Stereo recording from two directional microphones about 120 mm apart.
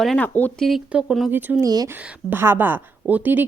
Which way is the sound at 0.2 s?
15° left (ahead or behind).